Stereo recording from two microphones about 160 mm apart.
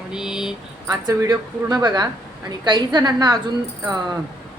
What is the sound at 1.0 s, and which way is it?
A woman's voice, 20° right (ahead or behind).